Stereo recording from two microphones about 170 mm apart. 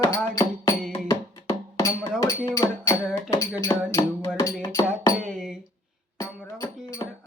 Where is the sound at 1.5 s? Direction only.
20° left (ahead or behind).